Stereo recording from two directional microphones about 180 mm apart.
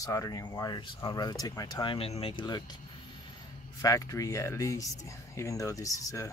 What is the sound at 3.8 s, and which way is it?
Speech, 20° left (ahead or behind).